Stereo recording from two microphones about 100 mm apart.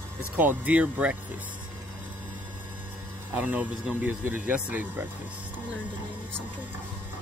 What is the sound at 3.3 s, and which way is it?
Speech, 10° right (ahead or behind).